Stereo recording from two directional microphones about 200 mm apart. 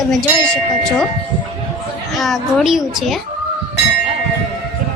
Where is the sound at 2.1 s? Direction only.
Centre (ahead or behind).